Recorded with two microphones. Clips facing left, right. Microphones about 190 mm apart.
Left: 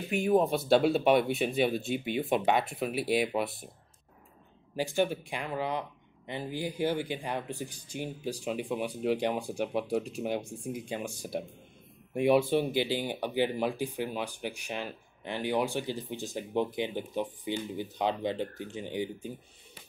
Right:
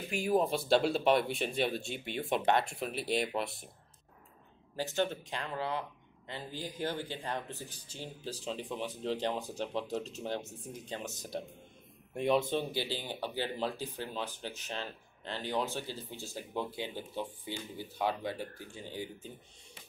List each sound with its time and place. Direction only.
0.1 s speech: centre (ahead or behind)
4.7 s speech: 10° left (ahead or behind)